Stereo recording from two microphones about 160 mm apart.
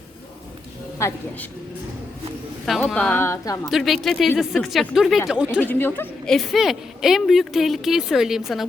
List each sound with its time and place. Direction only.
0.9 s a woman's voice: 15° left (ahead or behind)
2.6 s a woman's voice: 5° left (ahead or behind)
3.7 s a woman's voice: centre (ahead or behind)
5.5 s a woman's voice: 10° left (ahead or behind)
6.3 s a woman's voice: centre (ahead or behind)